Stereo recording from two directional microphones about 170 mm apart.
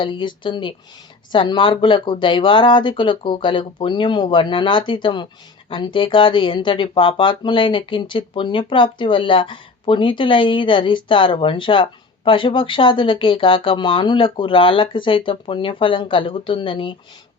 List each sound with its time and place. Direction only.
0.0 s speech: 30° left (ahead or behind)